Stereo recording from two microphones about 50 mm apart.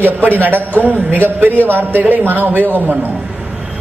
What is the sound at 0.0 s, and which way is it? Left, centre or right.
A man's voice, right.